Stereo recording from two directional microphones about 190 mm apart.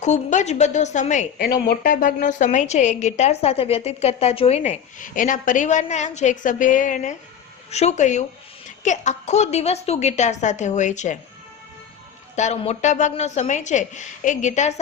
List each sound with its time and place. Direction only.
0.0 s a woman's voice: 40° left (ahead or behind)
1.4 s a woman's voice: 55° left (ahead or behind); by 11.2 s 40° left (ahead or behind)
12.4 s a woman's voice: 40° left (ahead or behind)